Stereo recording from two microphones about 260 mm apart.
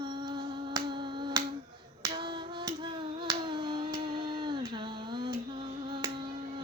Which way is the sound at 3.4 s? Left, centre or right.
Centre.